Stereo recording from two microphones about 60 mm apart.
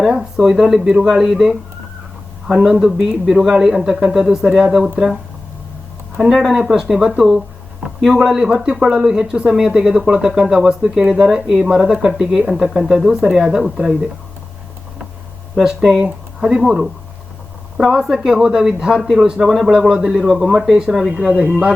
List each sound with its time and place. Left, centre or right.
0.1 s speech: centre
2.6 s speech: centre
6.1 s speech: centre
15.5 s speech: centre
16.0 s speech: centre
19.4 s speech: centre
19.6 s speech: centre
21.2 s speech: right